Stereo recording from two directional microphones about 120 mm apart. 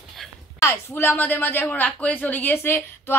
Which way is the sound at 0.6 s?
20° left (ahead or behind).